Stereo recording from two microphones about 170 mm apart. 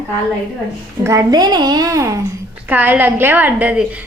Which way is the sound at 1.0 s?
20° right (ahead or behind).